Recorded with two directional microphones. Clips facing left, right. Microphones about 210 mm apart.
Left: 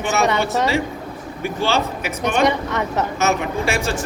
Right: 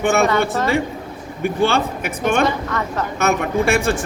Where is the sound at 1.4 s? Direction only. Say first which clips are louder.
Right 3 dB; 55° right (ahead or behind).